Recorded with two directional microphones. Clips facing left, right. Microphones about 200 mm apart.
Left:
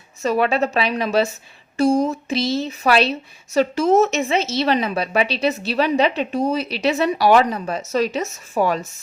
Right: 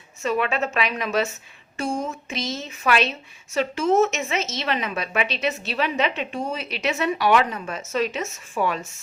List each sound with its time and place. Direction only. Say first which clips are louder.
0.2 s a woman's voice: left 5 dB; 35° left (ahead or behind)